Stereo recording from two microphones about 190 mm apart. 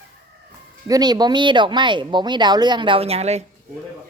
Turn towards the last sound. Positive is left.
turn(degrees=-35)  # may be behind; listen again after turning